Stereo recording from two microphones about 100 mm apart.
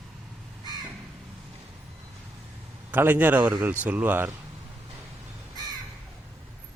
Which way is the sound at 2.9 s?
20° right (ahead or behind).